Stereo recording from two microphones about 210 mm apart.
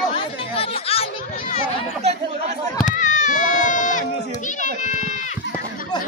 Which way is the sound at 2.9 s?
35° left (ahead or behind).